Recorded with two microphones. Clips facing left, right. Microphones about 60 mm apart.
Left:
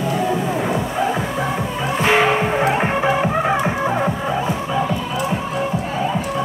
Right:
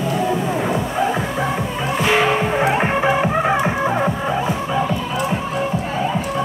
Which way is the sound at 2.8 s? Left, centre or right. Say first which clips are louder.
Right 1 dB; right.